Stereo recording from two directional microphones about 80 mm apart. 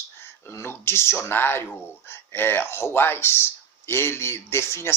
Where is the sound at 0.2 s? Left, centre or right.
Left.